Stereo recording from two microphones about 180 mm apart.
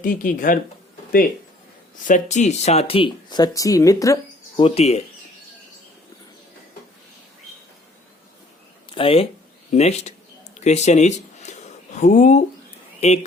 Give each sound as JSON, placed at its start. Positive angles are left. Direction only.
{"t": 0.0, "sound": "speech", "side_deg": 50}
{"t": 2.0, "sound": "speech", "side_deg": 45}
{"t": 4.5, "sound": "speech", "side_deg": 35}
{"t": 8.9, "sound": "speech", "side_deg": 30}
{"t": 9.7, "sound": "a sound", "side_deg": 40}
{"t": 11.9, "sound": "speech", "side_deg": 40}